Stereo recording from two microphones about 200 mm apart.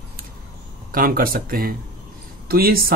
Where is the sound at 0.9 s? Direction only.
45° right (ahead or behind).